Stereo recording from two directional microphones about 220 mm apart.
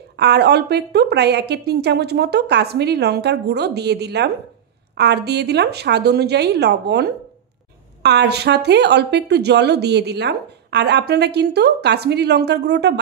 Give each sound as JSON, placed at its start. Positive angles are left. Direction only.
{"t": 0.2, "sound": "a woman's voice", "side_deg": -50}